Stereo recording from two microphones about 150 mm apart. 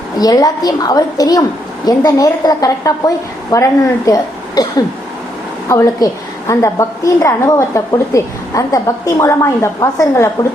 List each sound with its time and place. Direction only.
0.2 s a woman's voice: 25° left (ahead or behind)